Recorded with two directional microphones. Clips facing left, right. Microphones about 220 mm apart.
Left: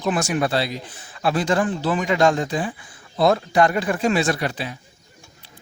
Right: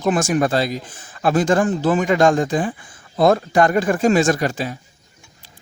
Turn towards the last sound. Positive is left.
turn(degrees=-45)  # may be behind; listen again after turning